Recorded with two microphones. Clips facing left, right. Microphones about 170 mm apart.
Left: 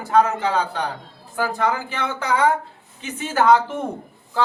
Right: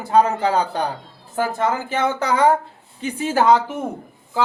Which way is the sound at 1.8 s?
40° right (ahead or behind).